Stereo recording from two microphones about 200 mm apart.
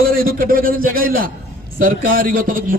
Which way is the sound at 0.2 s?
45° right (ahead or behind).